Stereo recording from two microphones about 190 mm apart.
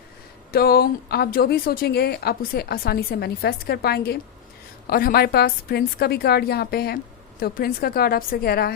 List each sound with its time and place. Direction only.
0.5 s a woman's voice: 55° left (ahead or behind)